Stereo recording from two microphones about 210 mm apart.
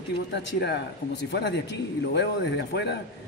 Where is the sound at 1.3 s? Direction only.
55° left (ahead or behind).